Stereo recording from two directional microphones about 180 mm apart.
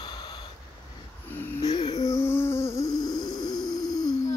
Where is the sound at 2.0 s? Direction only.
15° left (ahead or behind).